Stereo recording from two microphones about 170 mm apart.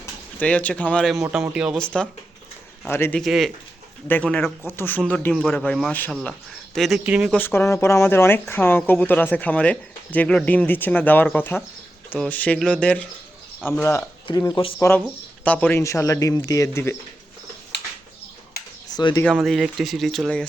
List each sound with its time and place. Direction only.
0.0 s speech: 10° left (ahead or behind)
1.5 s speech: 5° right (ahead or behind)
3.2 s speech: centre (ahead or behind)
7.3 s speech: 10° left (ahead or behind)
14.8 s speech: 10° left (ahead or behind)
18.9 s speech: 25° left (ahead or behind)
19.2 s speech: centre (ahead or behind)